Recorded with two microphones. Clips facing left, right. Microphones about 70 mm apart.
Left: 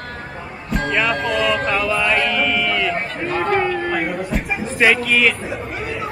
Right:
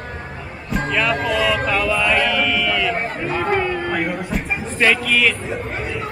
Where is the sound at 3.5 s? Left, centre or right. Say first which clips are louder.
Left 1 dB; centre.